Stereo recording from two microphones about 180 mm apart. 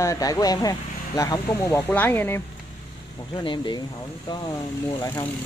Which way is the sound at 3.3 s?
25° left (ahead or behind).